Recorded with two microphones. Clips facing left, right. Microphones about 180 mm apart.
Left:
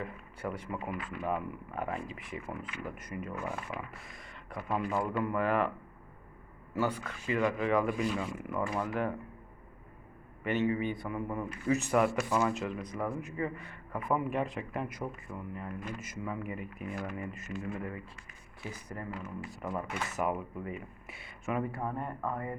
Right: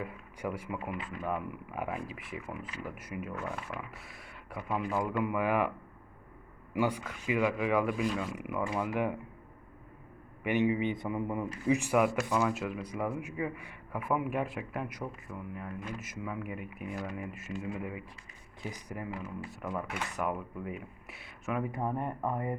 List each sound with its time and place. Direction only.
0.0 s speech: 10° right (ahead or behind)
6.7 s speech: 15° right (ahead or behind)
10.4 s speech: 15° right (ahead or behind)
20.1 s speech: centre (ahead or behind)
21.7 s speech: 20° right (ahead or behind)